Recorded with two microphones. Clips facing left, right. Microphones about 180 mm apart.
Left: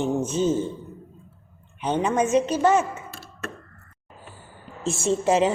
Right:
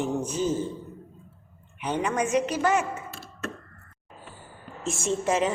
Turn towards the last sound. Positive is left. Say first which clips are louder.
# left 4 dB
turn(degrees=30)  # may be behind; listen again after turning